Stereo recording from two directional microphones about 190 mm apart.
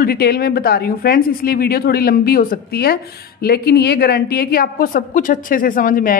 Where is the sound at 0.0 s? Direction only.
55° left (ahead or behind).